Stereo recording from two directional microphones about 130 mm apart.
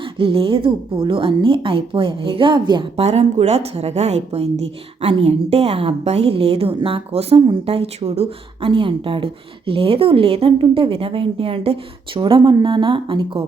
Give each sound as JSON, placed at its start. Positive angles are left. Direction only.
{"t": 0.2, "sound": "a woman's voice", "side_deg": -45}
{"t": 3.0, "sound": "a woman's voice", "side_deg": -55}